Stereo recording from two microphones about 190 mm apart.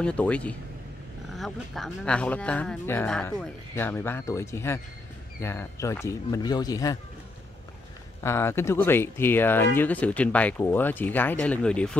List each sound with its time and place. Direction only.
0.0 s speech: 5° left (ahead or behind)
8.2 s speech: 15° left (ahead or behind)